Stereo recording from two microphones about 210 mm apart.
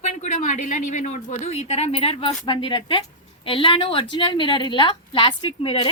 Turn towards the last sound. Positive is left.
turn(degrees=25)  # may be behind; listen again after turning